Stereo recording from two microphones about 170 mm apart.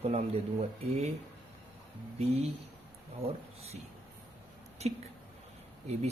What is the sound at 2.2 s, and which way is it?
Speech, 35° right (ahead or behind).